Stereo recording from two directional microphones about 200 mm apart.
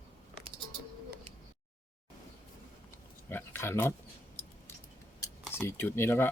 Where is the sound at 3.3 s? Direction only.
10° left (ahead or behind).